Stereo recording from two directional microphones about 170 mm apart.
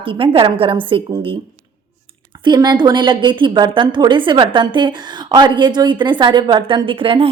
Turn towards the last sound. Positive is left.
turn(degrees=-30)  # may be behind; listen again after turning